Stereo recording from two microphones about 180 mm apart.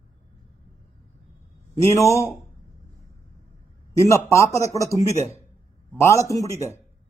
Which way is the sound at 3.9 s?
15° left (ahead or behind).